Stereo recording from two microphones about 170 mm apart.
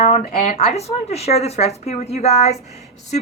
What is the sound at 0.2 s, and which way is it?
Speech, 40° left (ahead or behind).